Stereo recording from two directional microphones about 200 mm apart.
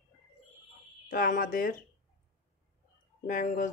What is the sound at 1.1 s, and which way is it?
Speech, 45° left (ahead or behind).